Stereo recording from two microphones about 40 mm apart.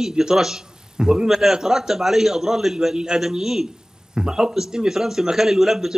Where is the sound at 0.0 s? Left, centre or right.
Centre.